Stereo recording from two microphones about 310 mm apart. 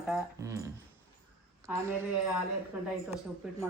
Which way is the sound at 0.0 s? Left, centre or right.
Centre.